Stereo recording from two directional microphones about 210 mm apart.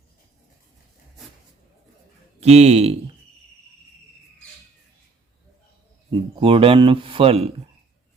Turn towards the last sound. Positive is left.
turn(degrees=-30)  # may be behind; listen again after turning